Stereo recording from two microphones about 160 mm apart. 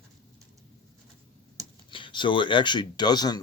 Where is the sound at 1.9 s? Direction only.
30° left (ahead or behind).